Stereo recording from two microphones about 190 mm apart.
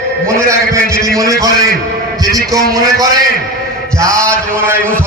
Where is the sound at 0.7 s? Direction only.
15° right (ahead or behind).